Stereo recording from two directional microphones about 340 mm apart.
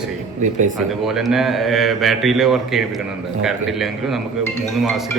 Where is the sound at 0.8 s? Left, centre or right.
Centre.